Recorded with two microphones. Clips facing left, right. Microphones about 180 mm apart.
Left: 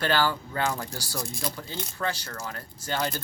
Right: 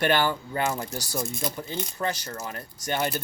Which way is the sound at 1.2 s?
5° right (ahead or behind).